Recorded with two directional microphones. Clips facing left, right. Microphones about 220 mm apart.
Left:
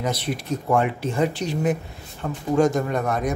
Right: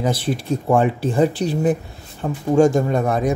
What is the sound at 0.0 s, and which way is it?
Speech, 30° right (ahead or behind).